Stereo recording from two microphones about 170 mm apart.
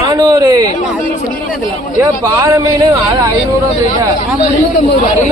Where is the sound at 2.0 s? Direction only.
15° right (ahead or behind).